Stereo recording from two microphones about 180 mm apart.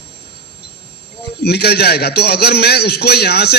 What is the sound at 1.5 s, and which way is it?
A man's voice, 65° left (ahead or behind).